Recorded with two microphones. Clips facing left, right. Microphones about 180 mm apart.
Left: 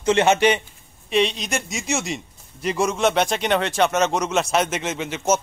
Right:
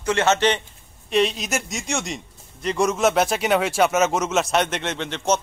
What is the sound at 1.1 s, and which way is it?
A man's voice, centre (ahead or behind).